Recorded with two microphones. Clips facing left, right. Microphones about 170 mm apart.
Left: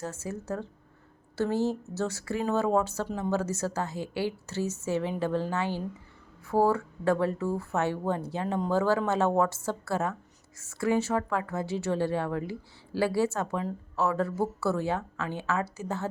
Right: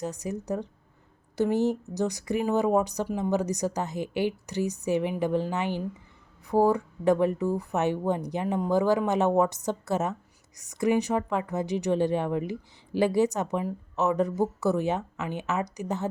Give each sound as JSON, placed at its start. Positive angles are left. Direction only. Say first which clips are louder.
{"t": 0.0, "sound": "speech", "louder": "right 3 dB", "side_deg": -15}